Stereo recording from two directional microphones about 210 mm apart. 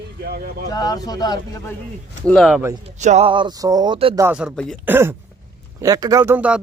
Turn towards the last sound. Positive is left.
turn(degrees=-5)  # may be behind; listen again after turning